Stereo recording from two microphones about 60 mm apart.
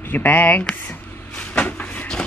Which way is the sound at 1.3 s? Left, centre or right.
Left.